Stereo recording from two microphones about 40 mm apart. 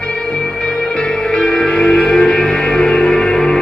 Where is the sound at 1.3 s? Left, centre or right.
Centre.